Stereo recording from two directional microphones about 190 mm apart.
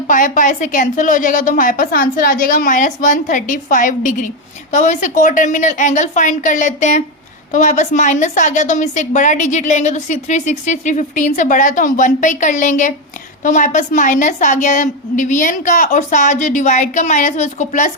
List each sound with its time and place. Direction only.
0.1 s a woman's voice: 45° left (ahead or behind)